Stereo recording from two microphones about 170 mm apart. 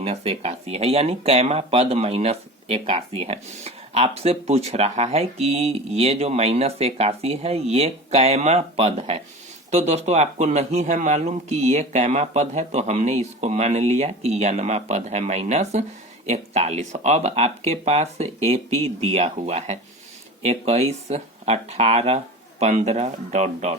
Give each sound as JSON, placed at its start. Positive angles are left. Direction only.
{"t": 0.0, "sound": "speech", "side_deg": -35}